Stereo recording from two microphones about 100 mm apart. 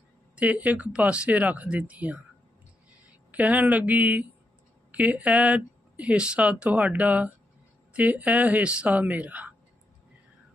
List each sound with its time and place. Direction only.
0.3 s speech: 15° right (ahead or behind)
3.3 s speech: 15° right (ahead or behind)